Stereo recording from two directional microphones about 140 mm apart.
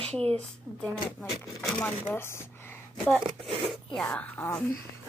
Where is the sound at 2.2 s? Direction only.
15° left (ahead or behind).